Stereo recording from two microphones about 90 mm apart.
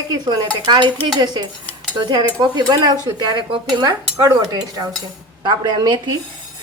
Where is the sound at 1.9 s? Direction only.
55° right (ahead or behind).